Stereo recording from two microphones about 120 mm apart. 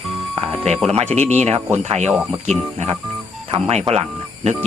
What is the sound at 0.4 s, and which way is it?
Music, 60° right (ahead or behind).